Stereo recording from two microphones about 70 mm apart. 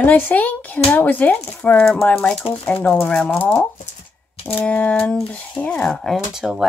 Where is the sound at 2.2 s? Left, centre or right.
Centre.